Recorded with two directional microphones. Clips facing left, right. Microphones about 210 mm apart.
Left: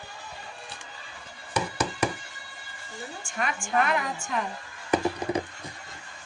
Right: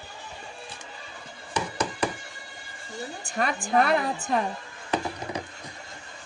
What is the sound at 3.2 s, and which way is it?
A woman's voice, 35° right (ahead or behind).